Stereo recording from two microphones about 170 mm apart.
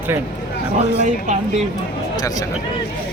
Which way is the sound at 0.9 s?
45° right (ahead or behind).